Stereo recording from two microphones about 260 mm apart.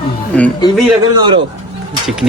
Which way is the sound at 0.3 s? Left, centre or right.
Centre.